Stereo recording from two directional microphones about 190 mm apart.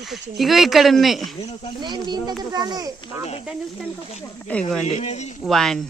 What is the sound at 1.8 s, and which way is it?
Speech, 20° right (ahead or behind).